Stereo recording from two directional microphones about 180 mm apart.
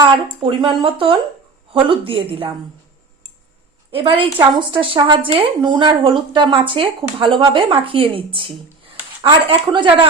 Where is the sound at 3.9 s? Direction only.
30° right (ahead or behind).